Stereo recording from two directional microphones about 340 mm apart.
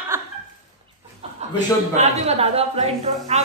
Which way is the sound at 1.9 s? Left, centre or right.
Centre.